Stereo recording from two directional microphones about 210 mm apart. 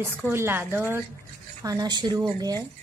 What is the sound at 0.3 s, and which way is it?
A woman's voice, 10° right (ahead or behind).